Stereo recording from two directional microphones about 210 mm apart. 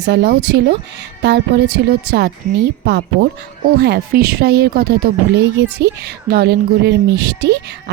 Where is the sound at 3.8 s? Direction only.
50° right (ahead or behind).